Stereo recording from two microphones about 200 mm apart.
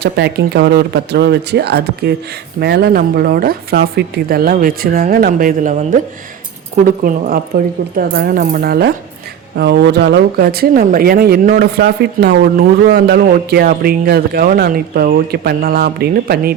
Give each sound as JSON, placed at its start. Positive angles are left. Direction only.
{"t": 0.0, "sound": "speech", "side_deg": -55}